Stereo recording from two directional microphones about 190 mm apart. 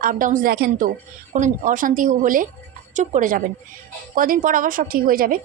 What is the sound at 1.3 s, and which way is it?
A woman's voice, 40° right (ahead or behind).